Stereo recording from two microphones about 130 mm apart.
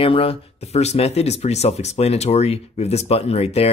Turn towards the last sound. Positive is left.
turn(degrees=50)  # may be behind; listen again after turning